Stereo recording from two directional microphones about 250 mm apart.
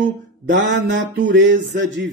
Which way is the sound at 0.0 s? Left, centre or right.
Right.